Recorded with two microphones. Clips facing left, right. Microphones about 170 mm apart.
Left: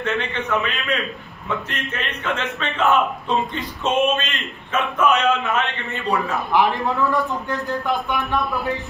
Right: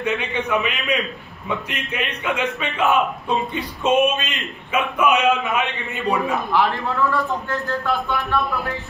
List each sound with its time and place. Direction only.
0.0 s a man's voice: 15° right (ahead or behind)
6.5 s a man's voice: 15° left (ahead or behind)